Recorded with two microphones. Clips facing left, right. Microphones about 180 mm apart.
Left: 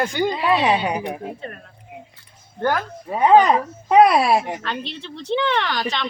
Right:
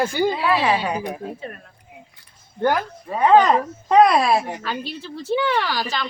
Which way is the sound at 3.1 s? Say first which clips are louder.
Left 1 dB; 15° left (ahead or behind).